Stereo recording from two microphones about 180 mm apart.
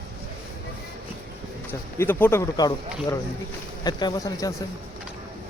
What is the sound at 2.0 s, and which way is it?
Speech, 10° left (ahead or behind).